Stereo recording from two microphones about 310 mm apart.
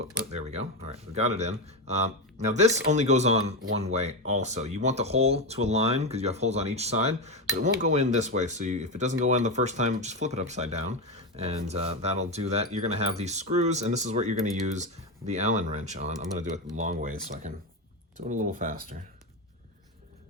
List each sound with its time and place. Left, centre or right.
1.1 s speech: right